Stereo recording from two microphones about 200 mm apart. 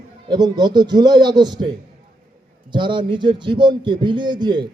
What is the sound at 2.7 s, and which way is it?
A man's voice, 25° right (ahead or behind).